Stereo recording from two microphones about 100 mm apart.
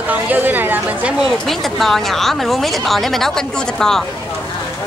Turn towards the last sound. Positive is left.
turn(degrees=5)  # may be behind; listen again after turning